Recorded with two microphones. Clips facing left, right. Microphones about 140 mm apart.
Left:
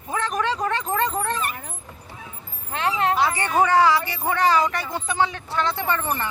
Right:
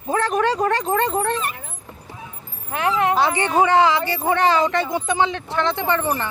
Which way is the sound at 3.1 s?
25° right (ahead or behind).